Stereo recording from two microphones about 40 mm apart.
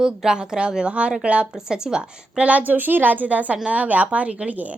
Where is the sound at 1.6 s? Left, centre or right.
Centre.